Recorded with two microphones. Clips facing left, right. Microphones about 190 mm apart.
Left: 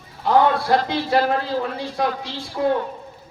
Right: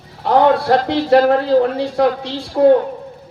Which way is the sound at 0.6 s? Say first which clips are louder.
Right 5 dB; 50° right (ahead or behind).